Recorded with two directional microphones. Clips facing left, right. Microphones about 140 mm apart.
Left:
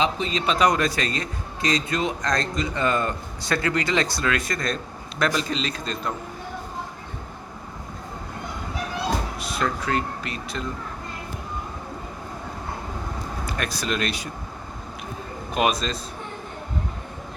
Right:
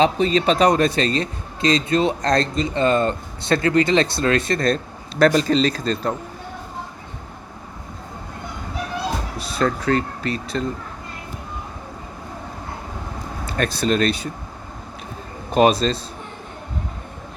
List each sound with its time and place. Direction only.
0.0 s a man's voice: 40° right (ahead or behind)
9.4 s a sound: 35° right (ahead or behind)
9.9 s a man's voice: 35° right (ahead or behind)
13.5 s speech: 30° right (ahead or behind)
15.5 s a man's voice: 35° right (ahead or behind)